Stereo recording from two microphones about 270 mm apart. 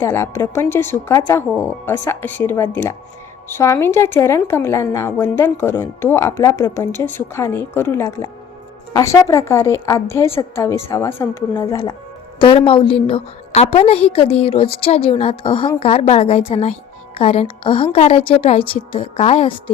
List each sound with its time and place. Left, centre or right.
0.0 s a woman's voice: centre